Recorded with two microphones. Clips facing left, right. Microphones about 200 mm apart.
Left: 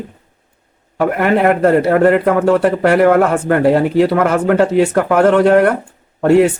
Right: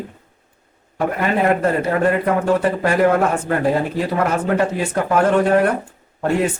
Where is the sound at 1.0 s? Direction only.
65° left (ahead or behind).